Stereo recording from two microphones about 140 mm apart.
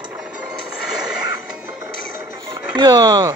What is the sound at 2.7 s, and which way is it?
Speech, 30° right (ahead or behind).